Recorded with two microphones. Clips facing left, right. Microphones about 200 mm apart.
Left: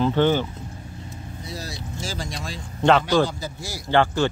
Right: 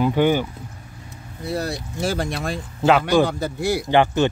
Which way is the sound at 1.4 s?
60° right (ahead or behind).